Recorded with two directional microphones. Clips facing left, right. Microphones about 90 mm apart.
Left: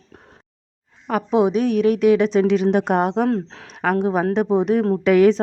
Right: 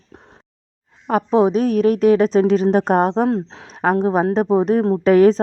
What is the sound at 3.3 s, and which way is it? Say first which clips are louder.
Speech: right 1 dB; 20° right (ahead or behind).